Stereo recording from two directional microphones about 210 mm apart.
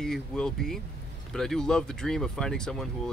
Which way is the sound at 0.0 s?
Centre (ahead or behind).